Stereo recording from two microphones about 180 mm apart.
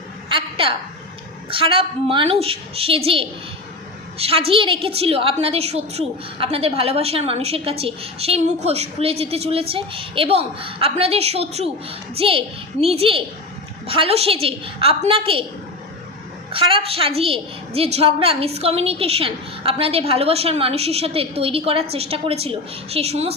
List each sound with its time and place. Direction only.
0.3 s a sound: 30° right (ahead or behind)
1.5 s a woman's voice: 30° right (ahead or behind)
16.5 s a woman's voice: 30° right (ahead or behind)